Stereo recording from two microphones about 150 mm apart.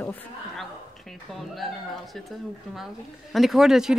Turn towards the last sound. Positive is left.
turn(degrees=-5)  # may be behind; listen again after turning